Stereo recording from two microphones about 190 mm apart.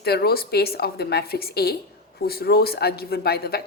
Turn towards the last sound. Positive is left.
turn(degrees=55)  # may be behind; listen again after turning